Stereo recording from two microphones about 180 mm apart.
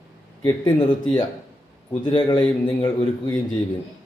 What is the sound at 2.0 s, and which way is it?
A man's voice, 25° left (ahead or behind).